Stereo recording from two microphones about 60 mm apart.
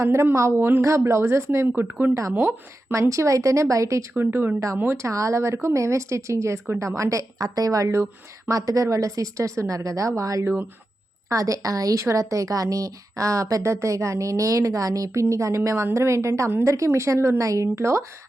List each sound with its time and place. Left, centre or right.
0.0 s speech: right
0.8 s speech: right
1.5 s speech: right
2.9 s a woman's voice: right
4.1 s speech: right
4.9 s a woman's voice: right